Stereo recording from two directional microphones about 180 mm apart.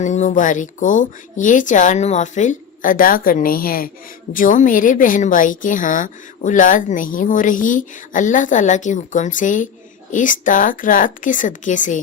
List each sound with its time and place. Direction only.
0.0 s a woman's voice: 40° left (ahead or behind)